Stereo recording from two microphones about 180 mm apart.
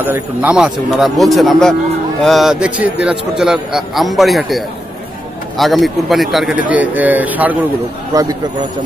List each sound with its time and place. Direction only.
0.0 s a man's voice: 10° right (ahead or behind)
8.1 s speech: 20° right (ahead or behind)